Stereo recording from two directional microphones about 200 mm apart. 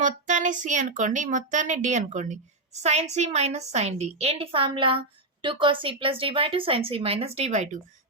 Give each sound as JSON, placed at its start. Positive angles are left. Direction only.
{"t": 0.0, "sound": "a woman's voice", "side_deg": -40}